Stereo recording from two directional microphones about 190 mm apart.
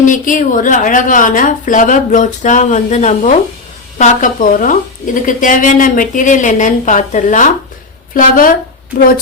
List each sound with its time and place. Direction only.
0.0 s a woman's voice: 45° left (ahead or behind)